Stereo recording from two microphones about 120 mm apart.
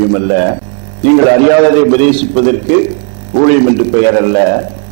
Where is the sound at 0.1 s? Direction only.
20° right (ahead or behind).